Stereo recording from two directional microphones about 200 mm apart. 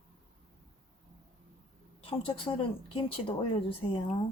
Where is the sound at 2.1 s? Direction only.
25° left (ahead or behind).